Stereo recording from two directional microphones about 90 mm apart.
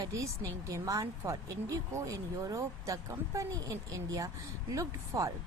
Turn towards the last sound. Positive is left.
turn(degrees=-40)  # may be behind; listen again after turning